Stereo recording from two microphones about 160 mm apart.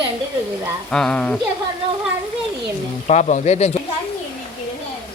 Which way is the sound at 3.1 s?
45° left (ahead or behind).